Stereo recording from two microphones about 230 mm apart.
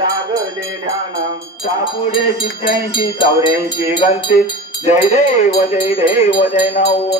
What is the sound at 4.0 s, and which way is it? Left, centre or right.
Speech, left.